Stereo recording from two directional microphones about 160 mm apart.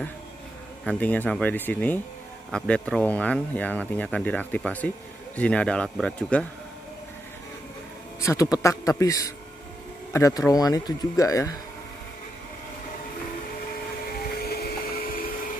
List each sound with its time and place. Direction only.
0.8 s speech: 10° left (ahead or behind)
8.2 s speech: 20° left (ahead or behind)
14.4 s vacuum cleaner: 75° left (ahead or behind)